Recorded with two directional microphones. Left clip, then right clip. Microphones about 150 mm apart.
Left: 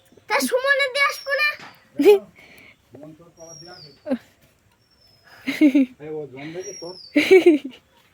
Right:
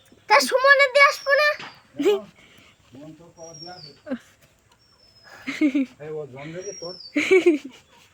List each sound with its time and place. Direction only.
0.3 s a child's voice: 25° left (ahead or behind)
2.0 s speech: 50° left (ahead or behind)
4.0 s speech: 50° left (ahead or behind)
5.5 s speech: 50° left (ahead or behind)